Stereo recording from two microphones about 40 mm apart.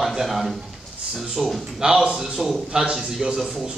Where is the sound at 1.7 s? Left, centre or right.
Centre.